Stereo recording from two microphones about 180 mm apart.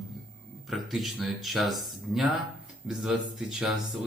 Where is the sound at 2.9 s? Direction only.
5° right (ahead or behind).